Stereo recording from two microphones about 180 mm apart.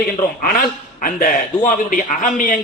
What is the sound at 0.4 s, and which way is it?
A man's voice, 50° left (ahead or behind).